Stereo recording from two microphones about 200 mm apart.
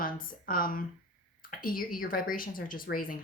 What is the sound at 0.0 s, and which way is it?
A woman's voice, 45° left (ahead or behind).